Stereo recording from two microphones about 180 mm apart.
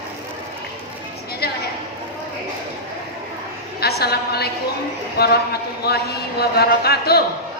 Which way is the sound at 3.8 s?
60° left (ahead or behind).